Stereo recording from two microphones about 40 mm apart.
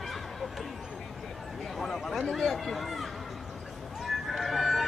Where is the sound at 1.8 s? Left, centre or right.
Centre.